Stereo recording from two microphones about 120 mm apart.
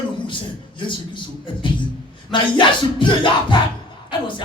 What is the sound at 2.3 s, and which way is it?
Speech, 40° left (ahead or behind).